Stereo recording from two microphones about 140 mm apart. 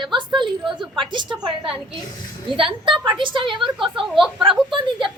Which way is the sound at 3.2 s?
35° right (ahead or behind).